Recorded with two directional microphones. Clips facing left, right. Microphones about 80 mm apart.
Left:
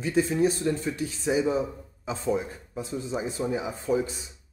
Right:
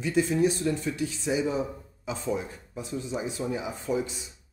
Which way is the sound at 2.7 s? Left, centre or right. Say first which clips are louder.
Left 2 dB; left.